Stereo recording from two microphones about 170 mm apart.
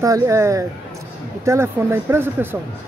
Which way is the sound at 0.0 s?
20° right (ahead or behind).